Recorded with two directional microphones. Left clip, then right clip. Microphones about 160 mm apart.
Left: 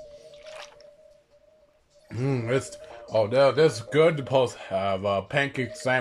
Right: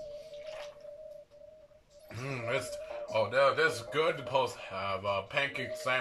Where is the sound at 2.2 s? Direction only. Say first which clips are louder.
Left 7 dB; 45° left (ahead or behind).